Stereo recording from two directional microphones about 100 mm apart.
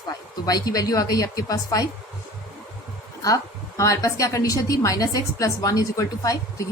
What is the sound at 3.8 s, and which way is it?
A woman's voice, 35° left (ahead or behind).